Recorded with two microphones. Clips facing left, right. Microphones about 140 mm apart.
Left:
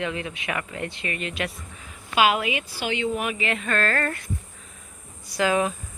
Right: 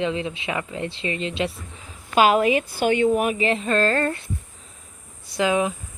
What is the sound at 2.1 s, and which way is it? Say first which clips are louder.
A woman's voice: right 5 dB; 40° right (ahead or behind).